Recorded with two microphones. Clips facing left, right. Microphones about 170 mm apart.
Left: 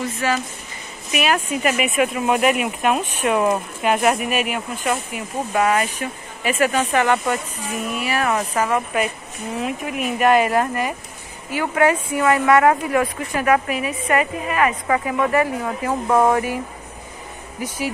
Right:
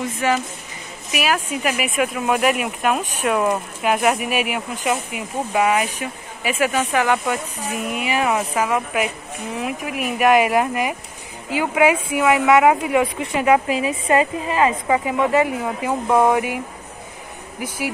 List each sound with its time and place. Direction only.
1.1 s speech: 5° right (ahead or behind)
7.7 s speech: 15° right (ahead or behind)
17.6 s speech: 10° right (ahead or behind)